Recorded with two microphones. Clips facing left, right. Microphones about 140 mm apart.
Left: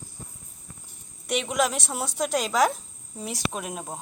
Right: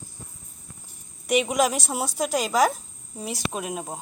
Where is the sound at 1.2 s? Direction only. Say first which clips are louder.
Right 4 dB; 10° right (ahead or behind).